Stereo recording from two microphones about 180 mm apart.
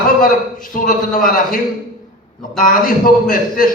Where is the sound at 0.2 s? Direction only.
50° left (ahead or behind).